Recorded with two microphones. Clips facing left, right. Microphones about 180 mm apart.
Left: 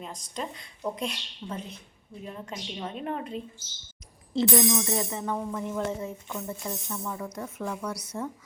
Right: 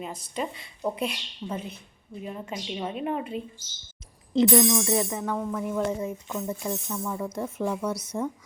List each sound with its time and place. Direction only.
0.0 s speech: 5° right (ahead or behind)
5.1 s speech: 10° left (ahead or behind)
5.6 s speech: 5° right (ahead or behind)
7.3 s speech: 25° right (ahead or behind)